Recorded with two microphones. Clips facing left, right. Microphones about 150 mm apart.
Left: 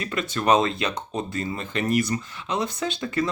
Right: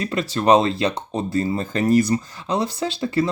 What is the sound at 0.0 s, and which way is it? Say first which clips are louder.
Speech: right 5 dB; 30° right (ahead or behind).